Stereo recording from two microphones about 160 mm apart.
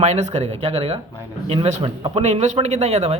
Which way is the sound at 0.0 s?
45° right (ahead or behind).